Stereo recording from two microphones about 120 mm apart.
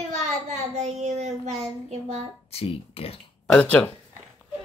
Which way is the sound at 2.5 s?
55° left (ahead or behind).